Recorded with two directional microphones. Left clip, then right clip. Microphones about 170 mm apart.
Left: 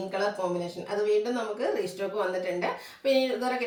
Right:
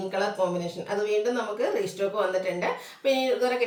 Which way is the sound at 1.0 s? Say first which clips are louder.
Even; 15° right (ahead or behind).